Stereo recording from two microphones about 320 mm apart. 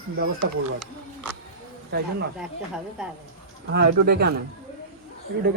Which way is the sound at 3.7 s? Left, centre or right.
Right.